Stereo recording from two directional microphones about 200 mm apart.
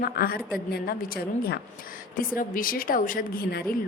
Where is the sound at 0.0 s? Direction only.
50° left (ahead or behind).